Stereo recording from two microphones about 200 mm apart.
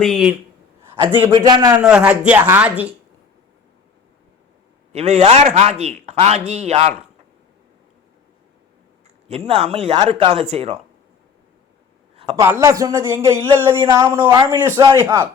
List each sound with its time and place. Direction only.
0.0 s speech: centre (ahead or behind)
1.3 s speech: 20° right (ahead or behind)
1.7 s speech: 5° right (ahead or behind)
4.9 s a man's voice: 35° right (ahead or behind)
9.5 s a man's voice: 30° right (ahead or behind)
12.1 s a sound: 30° right (ahead or behind)
12.4 s speech: 15° right (ahead or behind)
13.7 s speech: 25° right (ahead or behind)